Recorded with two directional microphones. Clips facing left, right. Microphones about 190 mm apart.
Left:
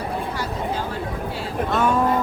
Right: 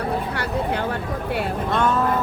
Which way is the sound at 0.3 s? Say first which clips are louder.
Right 2 dB; 65° right (ahead or behind).